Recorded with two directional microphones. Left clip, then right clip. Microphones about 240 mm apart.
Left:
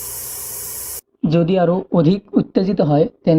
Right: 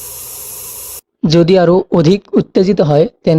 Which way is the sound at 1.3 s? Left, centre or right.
Right.